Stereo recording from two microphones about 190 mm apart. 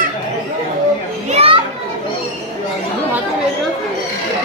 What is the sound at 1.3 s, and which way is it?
Children playing, 30° right (ahead or behind).